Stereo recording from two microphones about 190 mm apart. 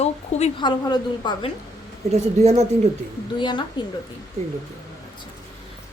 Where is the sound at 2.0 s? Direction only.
35° right (ahead or behind).